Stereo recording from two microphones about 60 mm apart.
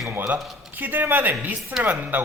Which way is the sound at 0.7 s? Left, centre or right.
Right.